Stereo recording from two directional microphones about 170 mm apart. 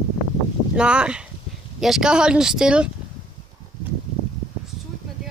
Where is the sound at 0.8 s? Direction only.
5° right (ahead or behind).